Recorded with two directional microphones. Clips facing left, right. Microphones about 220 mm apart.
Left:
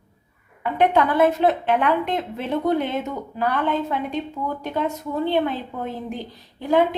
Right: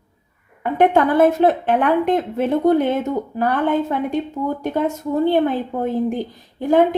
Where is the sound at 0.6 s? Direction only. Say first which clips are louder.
Right 4 dB; 50° right (ahead or behind).